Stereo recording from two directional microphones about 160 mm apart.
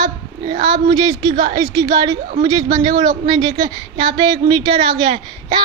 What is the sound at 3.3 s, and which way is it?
Speech, 25° right (ahead or behind).